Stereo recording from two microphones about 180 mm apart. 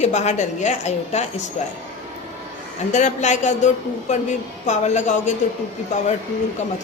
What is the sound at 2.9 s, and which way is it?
A woman's voice, 40° left (ahead or behind).